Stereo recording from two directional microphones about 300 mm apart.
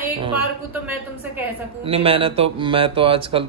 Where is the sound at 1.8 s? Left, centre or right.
Centre.